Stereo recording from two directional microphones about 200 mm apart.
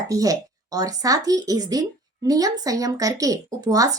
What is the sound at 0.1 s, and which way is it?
Speech, 15° right (ahead or behind).